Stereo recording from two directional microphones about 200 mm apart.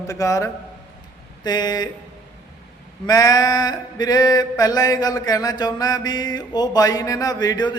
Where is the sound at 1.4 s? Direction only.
20° left (ahead or behind).